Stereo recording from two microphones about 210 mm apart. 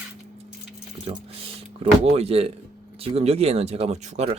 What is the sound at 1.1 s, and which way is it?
Speech, 25° right (ahead or behind).